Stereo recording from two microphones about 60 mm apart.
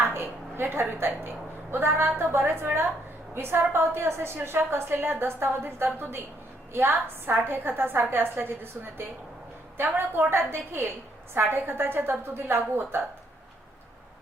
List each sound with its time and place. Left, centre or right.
0.0 s a sound: right
1.7 s a woman's voice: right
10.2 s a woman's voice: right